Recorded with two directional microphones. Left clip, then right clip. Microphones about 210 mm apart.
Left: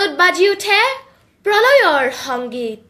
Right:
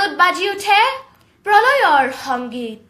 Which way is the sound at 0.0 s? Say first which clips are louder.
Left 2 dB; 40° left (ahead or behind).